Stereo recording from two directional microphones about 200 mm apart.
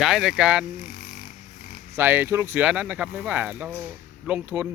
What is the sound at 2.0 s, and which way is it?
Speech, 10° right (ahead or behind).